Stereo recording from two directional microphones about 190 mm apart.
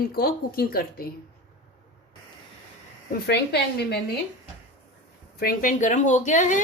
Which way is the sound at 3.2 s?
60° left (ahead or behind).